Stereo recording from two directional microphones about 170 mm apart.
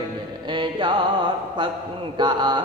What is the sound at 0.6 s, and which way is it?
Music, 30° right (ahead or behind).